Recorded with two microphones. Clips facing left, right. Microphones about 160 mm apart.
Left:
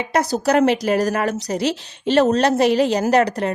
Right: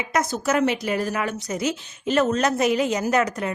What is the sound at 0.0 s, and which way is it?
A woman's voice, 35° left (ahead or behind).